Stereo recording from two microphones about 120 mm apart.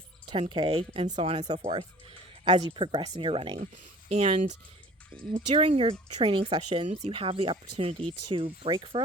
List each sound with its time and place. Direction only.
0.3 s speech: 45° right (ahead or behind)
1.0 s speech: 65° right (ahead or behind)
2.4 s speech: 40° right (ahead or behind)
4.1 s speech: 65° right (ahead or behind)
5.1 s speech: 50° right (ahead or behind)